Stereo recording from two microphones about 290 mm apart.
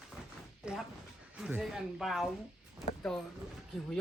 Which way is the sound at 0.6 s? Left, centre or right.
Centre.